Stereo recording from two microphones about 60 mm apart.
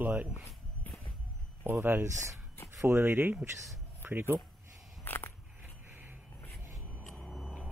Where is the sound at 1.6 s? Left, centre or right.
Right.